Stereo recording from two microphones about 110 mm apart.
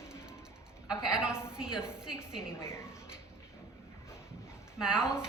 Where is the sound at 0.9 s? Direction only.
5° right (ahead or behind).